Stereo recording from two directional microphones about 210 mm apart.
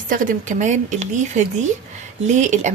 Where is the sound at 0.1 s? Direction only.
35° right (ahead or behind).